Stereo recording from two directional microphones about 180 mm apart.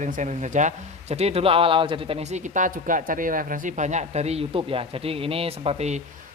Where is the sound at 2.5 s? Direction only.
45° right (ahead or behind).